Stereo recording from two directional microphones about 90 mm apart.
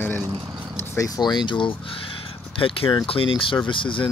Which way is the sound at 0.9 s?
40° left (ahead or behind).